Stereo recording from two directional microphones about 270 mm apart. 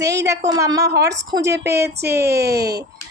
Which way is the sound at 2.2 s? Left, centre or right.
Right.